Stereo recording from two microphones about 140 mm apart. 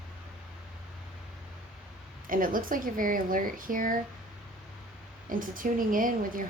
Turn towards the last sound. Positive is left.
turn(degrees=-75)  # may be behind; listen again after turning